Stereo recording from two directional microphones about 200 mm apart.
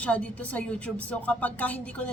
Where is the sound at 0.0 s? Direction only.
5° left (ahead or behind).